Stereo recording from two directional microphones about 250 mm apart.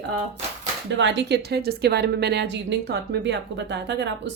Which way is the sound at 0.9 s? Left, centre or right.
Right.